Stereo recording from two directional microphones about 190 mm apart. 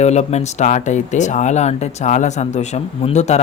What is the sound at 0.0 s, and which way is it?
Speech, 35° left (ahead or behind).